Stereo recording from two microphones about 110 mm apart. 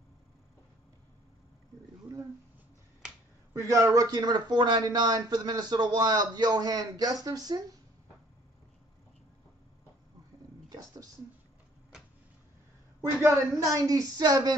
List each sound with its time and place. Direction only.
3.5 s speech: 30° right (ahead or behind)
10.7 s a sound: 35° right (ahead or behind)
13.0 s speech: 30° right (ahead or behind)